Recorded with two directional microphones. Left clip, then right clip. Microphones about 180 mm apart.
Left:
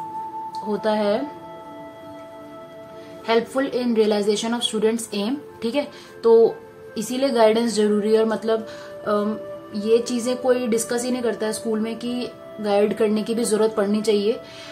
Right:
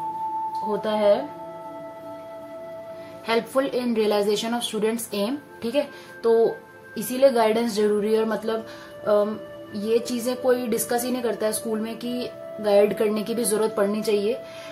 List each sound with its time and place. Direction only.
0.7 s speech: 20° left (ahead or behind)
3.3 s a woman's voice: 10° left (ahead or behind)
9.8 s a woman's voice: 10° left (ahead or behind)